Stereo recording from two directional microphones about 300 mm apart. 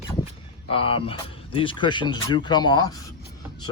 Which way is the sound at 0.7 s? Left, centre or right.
Centre.